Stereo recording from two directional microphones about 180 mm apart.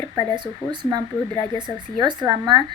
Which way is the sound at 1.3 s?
20° left (ahead or behind).